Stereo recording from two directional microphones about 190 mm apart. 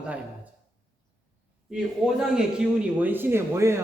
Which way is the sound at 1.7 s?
5° right (ahead or behind).